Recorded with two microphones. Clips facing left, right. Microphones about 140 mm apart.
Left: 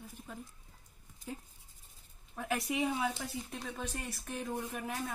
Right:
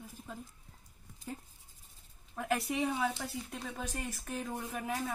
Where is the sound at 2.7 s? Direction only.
10° left (ahead or behind).